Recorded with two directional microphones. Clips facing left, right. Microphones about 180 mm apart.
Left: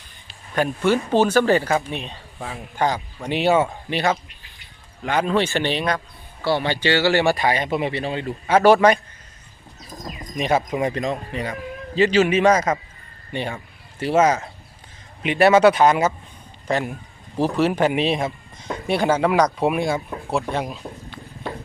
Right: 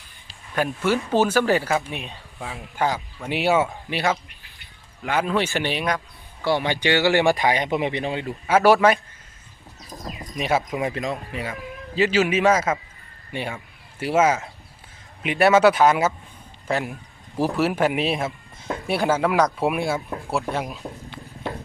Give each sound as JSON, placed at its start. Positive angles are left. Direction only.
{"t": 0.9, "sound": "speech", "side_deg": -5}
{"t": 10.0, "sound": "bird", "side_deg": -5}
{"t": 10.8, "sound": "speech", "side_deg": -5}